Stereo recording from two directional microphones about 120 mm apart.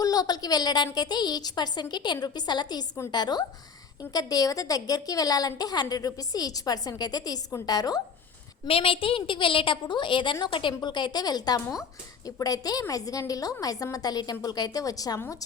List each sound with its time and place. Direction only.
0.0 s a woman's voice: 30° left (ahead or behind)
8.6 s a woman's voice: 50° left (ahead or behind); by 15.4 s 25° left (ahead or behind)